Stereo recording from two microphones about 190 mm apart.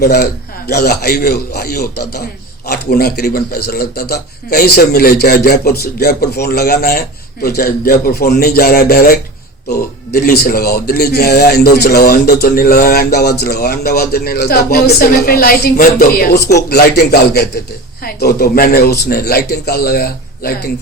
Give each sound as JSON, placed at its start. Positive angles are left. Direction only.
{"t": 0.0, "sound": "speech", "side_deg": 55}